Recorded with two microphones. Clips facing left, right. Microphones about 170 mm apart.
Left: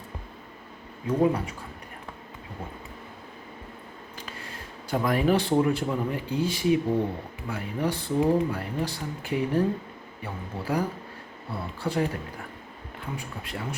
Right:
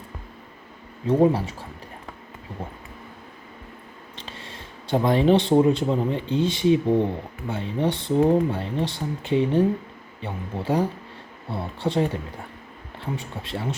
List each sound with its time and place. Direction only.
1.0 s speech: 30° right (ahead or behind)
4.1 s speech: 25° right (ahead or behind)